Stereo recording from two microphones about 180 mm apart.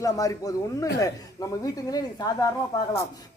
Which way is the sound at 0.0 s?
20° left (ahead or behind).